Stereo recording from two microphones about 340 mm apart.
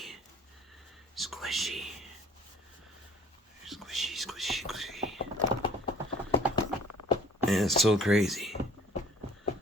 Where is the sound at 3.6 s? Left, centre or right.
Centre.